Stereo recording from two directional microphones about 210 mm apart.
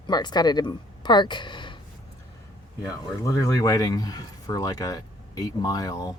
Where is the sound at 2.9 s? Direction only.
15° left (ahead or behind).